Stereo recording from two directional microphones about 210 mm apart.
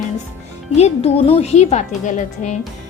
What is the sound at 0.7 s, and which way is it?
A woman's voice, 30° left (ahead or behind).